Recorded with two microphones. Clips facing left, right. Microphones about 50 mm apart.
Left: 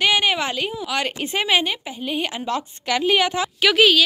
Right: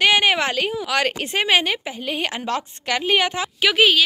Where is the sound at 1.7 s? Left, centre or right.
Right.